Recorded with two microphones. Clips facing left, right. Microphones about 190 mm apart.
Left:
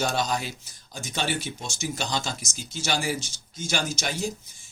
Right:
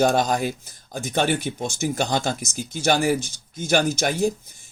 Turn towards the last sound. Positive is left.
turn(degrees=-55)  # may be behind; listen again after turning